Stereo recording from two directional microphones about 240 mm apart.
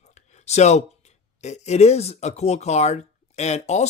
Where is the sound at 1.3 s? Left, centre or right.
Left.